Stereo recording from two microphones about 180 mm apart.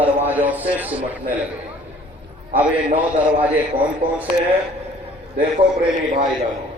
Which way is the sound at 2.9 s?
5° right (ahead or behind).